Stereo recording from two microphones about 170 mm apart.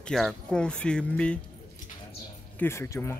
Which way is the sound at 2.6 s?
15° left (ahead or behind).